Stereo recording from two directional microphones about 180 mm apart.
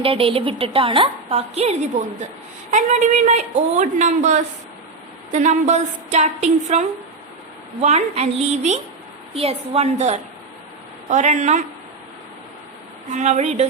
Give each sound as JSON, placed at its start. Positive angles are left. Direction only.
{"t": 0.0, "sound": "a woman's voice", "side_deg": -30}
{"t": 13.1, "sound": "a woman's voice", "side_deg": -40}